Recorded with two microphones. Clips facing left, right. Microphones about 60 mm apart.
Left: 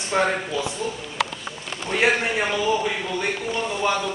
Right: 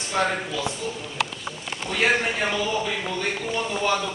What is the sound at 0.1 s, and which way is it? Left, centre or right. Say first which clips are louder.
Speech: left 2 dB; left.